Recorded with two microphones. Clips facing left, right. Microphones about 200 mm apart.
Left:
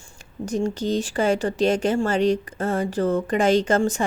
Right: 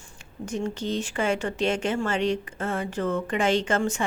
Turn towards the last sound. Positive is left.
turn(degrees=40)  # may be behind; listen again after turning